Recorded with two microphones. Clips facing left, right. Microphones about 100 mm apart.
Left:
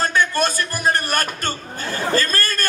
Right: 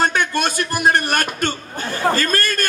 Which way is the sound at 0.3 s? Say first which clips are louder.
Even; 40° left (ahead or behind).